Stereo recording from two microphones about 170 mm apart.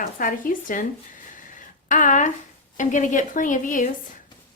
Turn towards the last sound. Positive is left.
turn(degrees=50)  # may be behind; listen again after turning